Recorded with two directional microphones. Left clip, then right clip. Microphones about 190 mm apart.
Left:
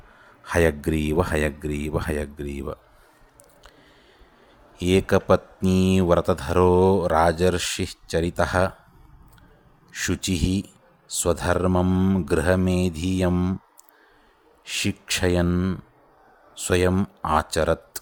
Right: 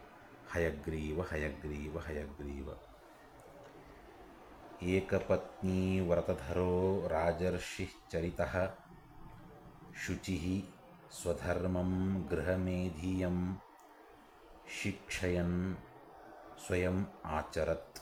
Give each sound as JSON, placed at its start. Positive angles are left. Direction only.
{"t": 0.4, "sound": "speech", "side_deg": 45}
{"t": 4.8, "sound": "speech", "side_deg": 50}
{"t": 9.9, "sound": "speech", "side_deg": 55}
{"t": 14.8, "sound": "speech", "side_deg": 50}